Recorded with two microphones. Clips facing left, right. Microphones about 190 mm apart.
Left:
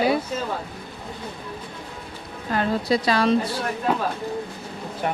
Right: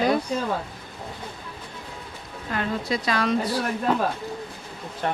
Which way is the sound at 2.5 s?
35° left (ahead or behind).